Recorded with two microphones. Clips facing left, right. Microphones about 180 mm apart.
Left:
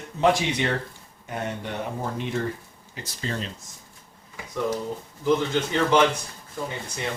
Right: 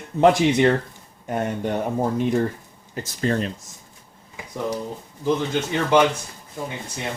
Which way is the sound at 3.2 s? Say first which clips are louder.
Right 8 dB; 55° right (ahead or behind).